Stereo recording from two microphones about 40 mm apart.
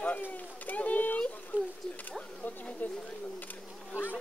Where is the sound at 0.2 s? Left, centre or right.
Left.